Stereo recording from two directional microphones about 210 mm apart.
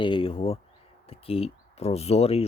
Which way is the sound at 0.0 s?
25° left (ahead or behind).